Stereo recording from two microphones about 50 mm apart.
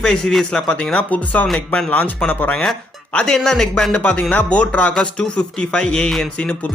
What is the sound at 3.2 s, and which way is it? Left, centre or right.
Speech, centre.